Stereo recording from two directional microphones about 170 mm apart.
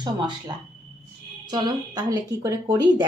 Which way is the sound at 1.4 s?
25° right (ahead or behind).